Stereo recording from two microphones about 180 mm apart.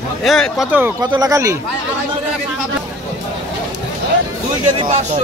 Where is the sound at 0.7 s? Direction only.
10° right (ahead or behind).